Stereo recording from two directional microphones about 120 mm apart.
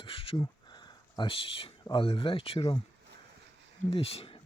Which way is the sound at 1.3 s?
50° left (ahead or behind).